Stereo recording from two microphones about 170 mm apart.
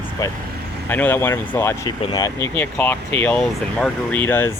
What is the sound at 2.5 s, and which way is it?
Speech, 10° left (ahead or behind).